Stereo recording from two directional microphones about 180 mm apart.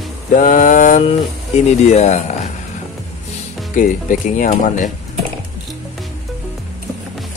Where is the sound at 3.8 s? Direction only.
45° left (ahead or behind).